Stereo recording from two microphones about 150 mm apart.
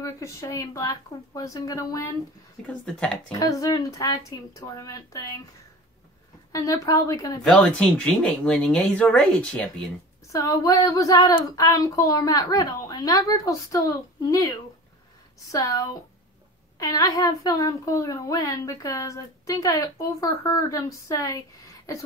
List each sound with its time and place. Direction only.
0.0 s a woman's voice: 20° left (ahead or behind)
2.6 s speech: 5° left (ahead or behind)
3.3 s a woman's voice: 25° left (ahead or behind)
6.5 s a woman's voice: 25° left (ahead or behind)
7.4 s speech: 5° left (ahead or behind)
10.3 s a woman's voice: 20° left (ahead or behind)
15.5 s a woman's voice: 20° left (ahead or behind)